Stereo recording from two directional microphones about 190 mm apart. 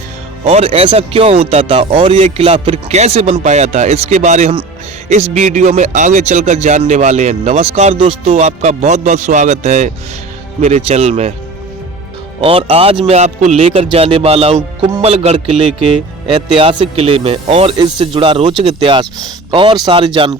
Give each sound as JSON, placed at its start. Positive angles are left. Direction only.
{"t": 0.4, "sound": "speech", "side_deg": -30}
{"t": 12.4, "sound": "speech", "side_deg": -30}